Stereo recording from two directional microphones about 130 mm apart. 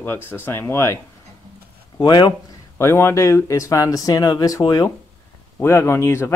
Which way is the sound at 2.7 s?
20° left (ahead or behind).